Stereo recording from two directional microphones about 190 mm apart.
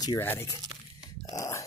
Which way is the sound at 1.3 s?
15° left (ahead or behind).